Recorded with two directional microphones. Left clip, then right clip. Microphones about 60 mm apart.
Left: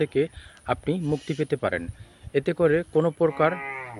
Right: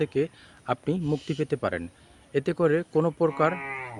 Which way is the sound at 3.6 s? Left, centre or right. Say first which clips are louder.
Left 1 dB; right.